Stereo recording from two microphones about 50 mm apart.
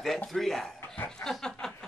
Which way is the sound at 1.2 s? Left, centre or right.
Centre.